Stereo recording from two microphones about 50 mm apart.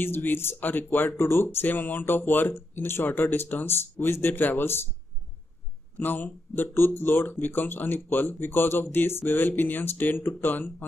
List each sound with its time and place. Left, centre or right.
0.0 s speech: left
1.2 s speech: left
5.9 s speech: left